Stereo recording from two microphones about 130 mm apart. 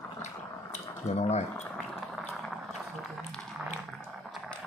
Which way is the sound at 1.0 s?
55° left (ahead or behind).